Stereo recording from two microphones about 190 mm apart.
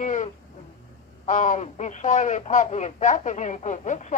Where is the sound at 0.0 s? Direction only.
40° left (ahead or behind).